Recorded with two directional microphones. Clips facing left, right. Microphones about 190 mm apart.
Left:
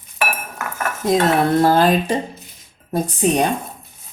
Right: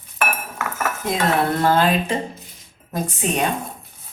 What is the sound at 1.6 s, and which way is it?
Speech, 35° left (ahead or behind).